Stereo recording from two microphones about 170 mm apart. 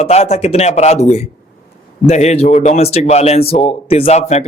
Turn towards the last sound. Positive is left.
turn(degrees=40)  # may be behind; listen again after turning